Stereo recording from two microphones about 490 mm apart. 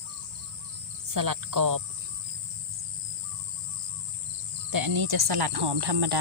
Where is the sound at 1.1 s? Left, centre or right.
Right.